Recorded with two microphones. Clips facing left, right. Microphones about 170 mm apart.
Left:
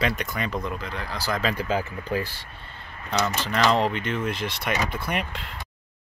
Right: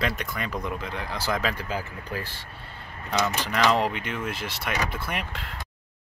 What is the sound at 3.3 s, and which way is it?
Speech, 10° right (ahead or behind).